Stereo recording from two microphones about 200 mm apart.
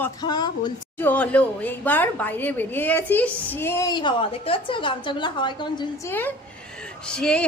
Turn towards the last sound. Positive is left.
turn(degrees=5)  # may be behind; listen again after turning